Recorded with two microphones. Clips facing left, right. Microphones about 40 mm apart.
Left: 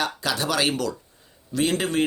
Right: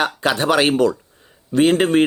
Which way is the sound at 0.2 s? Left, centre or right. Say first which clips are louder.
Right 10 dB; right.